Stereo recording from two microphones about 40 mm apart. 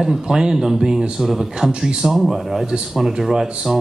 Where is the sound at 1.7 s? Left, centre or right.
Right.